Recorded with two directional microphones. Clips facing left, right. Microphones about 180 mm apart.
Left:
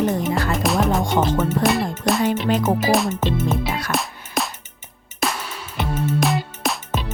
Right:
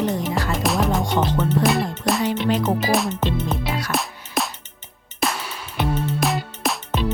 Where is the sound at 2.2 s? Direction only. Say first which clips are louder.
Left 1 dB; 50° left (ahead or behind).